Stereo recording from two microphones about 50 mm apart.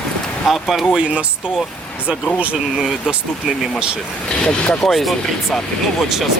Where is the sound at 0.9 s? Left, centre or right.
Centre.